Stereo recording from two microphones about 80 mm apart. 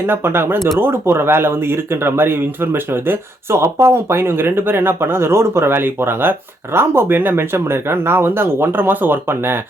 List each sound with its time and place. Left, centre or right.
0.0 s speech: right